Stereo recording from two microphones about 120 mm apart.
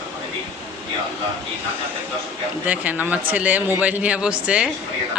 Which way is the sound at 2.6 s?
15° right (ahead or behind).